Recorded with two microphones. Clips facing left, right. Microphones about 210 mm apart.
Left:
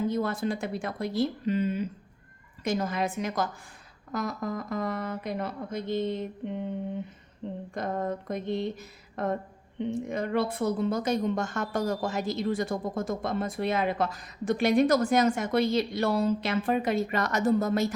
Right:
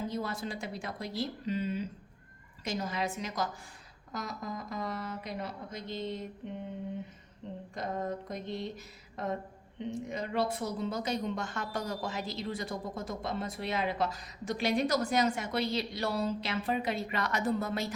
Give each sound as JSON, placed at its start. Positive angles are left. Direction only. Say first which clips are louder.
{"t": 0.1, "sound": "a woman's voice", "louder": "left 7 dB", "side_deg": 55}
{"t": 7.7, "sound": "a woman's voice", "louder": "left 4 dB", "side_deg": 55}